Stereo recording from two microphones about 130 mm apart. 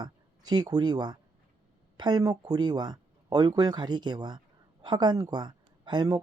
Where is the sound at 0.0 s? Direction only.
35° right (ahead or behind).